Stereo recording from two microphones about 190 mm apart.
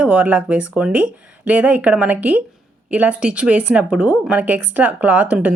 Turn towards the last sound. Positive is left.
turn(degrees=-5)  # may be behind; listen again after turning